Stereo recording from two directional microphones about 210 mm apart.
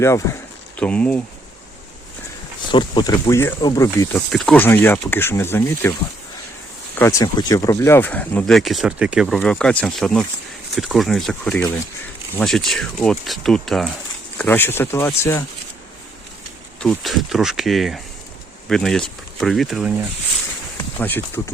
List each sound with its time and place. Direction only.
0.0 s speech: 15° left (ahead or behind)
2.7 s speech: 20° left (ahead or behind)
4.3 s speech: 5° left (ahead or behind)
7.0 s speech: 15° left (ahead or behind)
16.8 s speech: centre (ahead or behind)
21.0 s speech: 10° left (ahead or behind)